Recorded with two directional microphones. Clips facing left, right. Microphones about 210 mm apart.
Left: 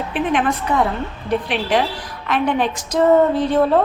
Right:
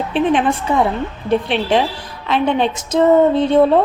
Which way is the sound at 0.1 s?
30° right (ahead or behind).